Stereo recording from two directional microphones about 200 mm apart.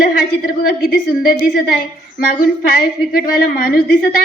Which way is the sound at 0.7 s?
50° left (ahead or behind).